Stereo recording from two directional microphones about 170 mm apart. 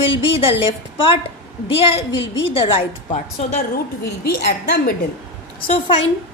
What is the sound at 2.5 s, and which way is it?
Speech, 35° left (ahead or behind).